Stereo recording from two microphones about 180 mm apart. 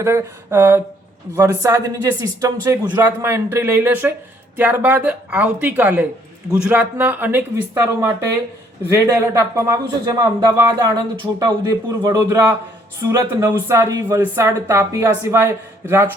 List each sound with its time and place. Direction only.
0.0 s a man's voice: 15° right (ahead or behind)